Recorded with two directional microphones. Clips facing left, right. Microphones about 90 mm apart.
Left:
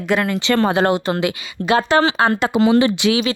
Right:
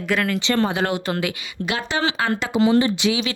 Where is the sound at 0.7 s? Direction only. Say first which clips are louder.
Left 6 dB; 35° left (ahead or behind).